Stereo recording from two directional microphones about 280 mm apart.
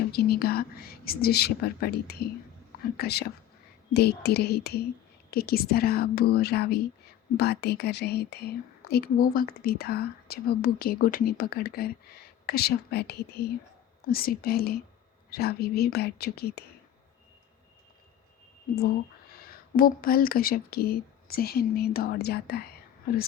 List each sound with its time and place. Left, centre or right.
0.1 s speech: left
19.5 s speech: left